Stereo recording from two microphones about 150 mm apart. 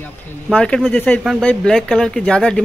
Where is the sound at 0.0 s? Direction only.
10° left (ahead or behind).